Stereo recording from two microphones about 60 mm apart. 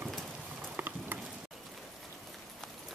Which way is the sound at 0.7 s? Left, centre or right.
Right.